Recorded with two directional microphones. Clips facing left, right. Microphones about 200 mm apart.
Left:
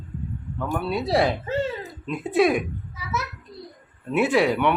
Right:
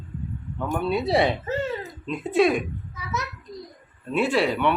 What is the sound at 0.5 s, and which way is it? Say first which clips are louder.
A child's voice: right 1 dB; 5° left (ahead or behind).